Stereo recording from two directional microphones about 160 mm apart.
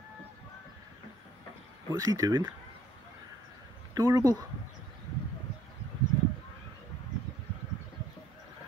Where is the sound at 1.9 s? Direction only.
20° right (ahead or behind).